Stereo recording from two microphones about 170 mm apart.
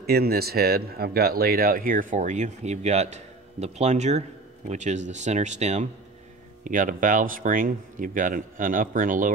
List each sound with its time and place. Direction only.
0.0 s speech: 65° right (ahead or behind)